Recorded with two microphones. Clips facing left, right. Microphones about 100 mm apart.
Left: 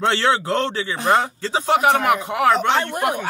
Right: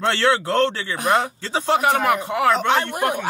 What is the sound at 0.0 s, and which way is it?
A man's voice, 10° left (ahead or behind).